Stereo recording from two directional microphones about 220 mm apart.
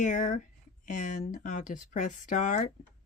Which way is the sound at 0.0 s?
35° left (ahead or behind).